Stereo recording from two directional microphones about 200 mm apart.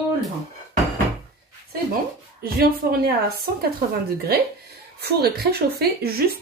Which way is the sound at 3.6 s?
50° right (ahead or behind).